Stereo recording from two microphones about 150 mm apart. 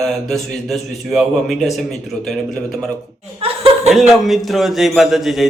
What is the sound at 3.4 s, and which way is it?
Chuckle, 40° right (ahead or behind).